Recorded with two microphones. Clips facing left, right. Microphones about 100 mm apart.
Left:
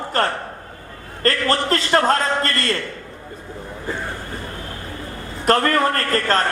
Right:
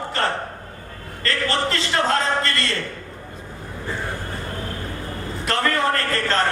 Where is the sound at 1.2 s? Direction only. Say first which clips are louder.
Left 3 dB; 45° left (ahead or behind).